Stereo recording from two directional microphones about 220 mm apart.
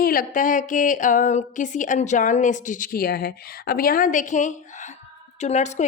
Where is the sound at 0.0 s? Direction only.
40° left (ahead or behind).